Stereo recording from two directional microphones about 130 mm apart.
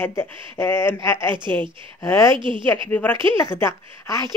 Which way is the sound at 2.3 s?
40° right (ahead or behind).